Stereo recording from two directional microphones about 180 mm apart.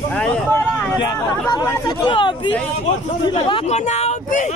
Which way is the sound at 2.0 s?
25° left (ahead or behind).